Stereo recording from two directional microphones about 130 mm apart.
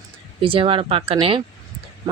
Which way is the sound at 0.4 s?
45° right (ahead or behind).